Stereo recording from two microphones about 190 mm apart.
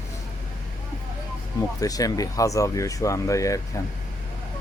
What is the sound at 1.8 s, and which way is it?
Speech, 20° left (ahead or behind).